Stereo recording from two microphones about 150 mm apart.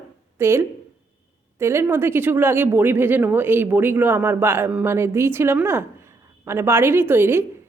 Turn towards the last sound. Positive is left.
turn(degrees=-15)  # may be behind; listen again after turning